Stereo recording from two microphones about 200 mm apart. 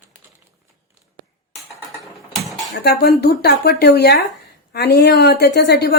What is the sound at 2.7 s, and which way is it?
Speech, 55° left (ahead or behind).